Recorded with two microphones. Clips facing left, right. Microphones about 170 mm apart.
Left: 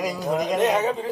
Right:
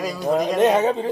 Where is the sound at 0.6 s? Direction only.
30° right (ahead or behind).